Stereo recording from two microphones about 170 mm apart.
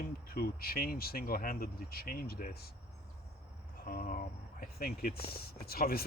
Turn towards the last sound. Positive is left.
turn(degrees=65)  # may be behind; listen again after turning